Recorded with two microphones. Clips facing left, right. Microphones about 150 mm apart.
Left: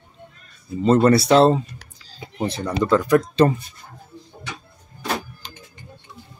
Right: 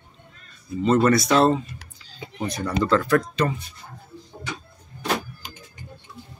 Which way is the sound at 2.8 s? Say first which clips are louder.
Left 3 dB; 15° left (ahead or behind).